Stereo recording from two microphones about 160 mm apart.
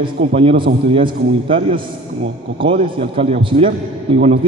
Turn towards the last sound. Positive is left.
turn(degrees=-40)  # may be behind; listen again after turning